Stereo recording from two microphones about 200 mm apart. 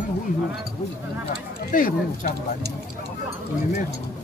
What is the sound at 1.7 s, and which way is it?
Speech, 40° left (ahead or behind).